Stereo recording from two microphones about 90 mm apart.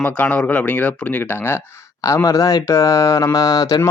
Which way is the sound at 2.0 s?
35° left (ahead or behind).